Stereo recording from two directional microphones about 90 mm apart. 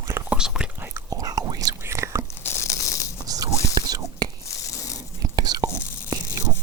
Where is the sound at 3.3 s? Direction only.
40° right (ahead or behind).